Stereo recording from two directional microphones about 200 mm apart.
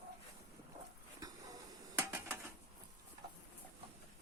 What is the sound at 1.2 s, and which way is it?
Hiss, 15° right (ahead or behind).